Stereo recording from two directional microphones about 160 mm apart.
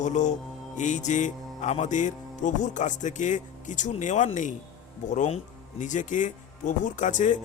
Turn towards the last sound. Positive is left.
turn(degrees=50)  # may be behind; listen again after turning